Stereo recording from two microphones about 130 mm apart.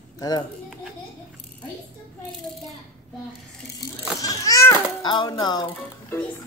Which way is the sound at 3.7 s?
25° left (ahead or behind).